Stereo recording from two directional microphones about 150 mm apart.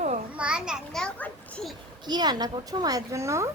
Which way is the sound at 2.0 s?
30° right (ahead or behind).